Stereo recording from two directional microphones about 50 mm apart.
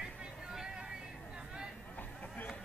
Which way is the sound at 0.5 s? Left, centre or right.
Centre.